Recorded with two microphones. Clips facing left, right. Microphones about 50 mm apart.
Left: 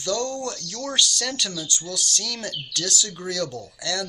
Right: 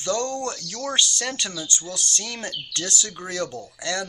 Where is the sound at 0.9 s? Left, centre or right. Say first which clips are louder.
Even; right.